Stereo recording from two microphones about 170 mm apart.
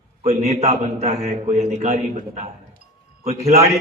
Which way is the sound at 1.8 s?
55° right (ahead or behind).